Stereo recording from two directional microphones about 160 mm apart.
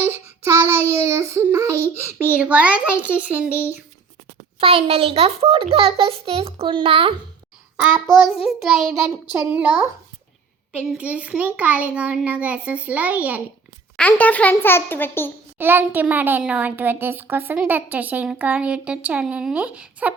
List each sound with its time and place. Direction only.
0.0 s child singing: 15° right (ahead or behind)
2.0 s a child's voice: 15° right (ahead or behind)
4.6 s a child's voice: 35° right (ahead or behind)
8.4 s child singing: centre (ahead or behind)
9.3 s a child's voice: 10° right (ahead or behind)
14.1 s a child's voice: 10° left (ahead or behind)
15.5 s a child's voice: 10° right (ahead or behind)